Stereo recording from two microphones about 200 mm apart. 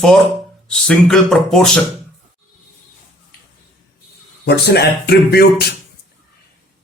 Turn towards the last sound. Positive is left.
turn(degrees=55)  # may be behind; listen again after turning